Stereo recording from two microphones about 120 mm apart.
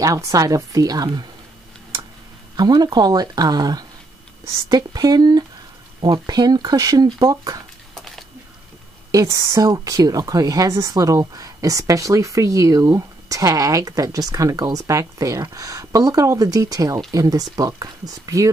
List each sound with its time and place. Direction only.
0.0 s speech: 30° right (ahead or behind)
2.5 s speech: 35° right (ahead or behind)
7.9 s a sound: centre (ahead or behind)
9.1 s speech: 30° right (ahead or behind)